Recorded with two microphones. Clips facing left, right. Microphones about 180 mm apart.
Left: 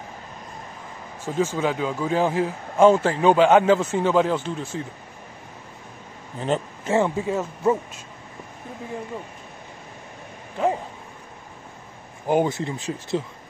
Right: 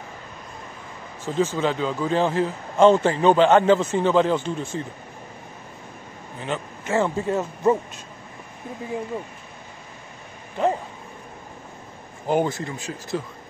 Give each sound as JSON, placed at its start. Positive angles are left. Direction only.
{"t": 1.2, "sound": "speech", "side_deg": 10}
{"t": 6.9, "sound": "speech", "side_deg": 15}
{"t": 7.2, "sound": "speech", "side_deg": 5}
{"t": 10.6, "sound": "speech", "side_deg": 5}
{"t": 12.3, "sound": "speech", "side_deg": 20}
{"t": 12.7, "sound": "speech", "side_deg": 35}